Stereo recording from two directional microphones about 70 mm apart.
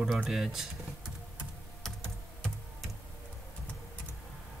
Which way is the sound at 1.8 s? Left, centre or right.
Centre.